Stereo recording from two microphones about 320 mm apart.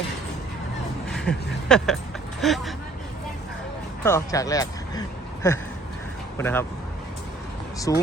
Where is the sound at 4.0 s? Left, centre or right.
Centre.